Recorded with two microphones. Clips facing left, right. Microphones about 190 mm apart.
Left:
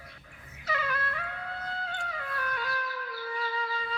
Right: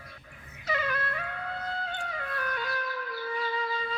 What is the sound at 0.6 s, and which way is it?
Music, 20° right (ahead or behind).